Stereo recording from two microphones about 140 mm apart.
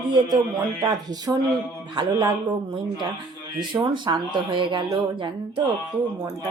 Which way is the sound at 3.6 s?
35° right (ahead or behind).